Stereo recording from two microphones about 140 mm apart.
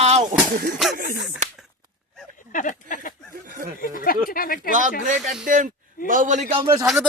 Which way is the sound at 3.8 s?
85° left.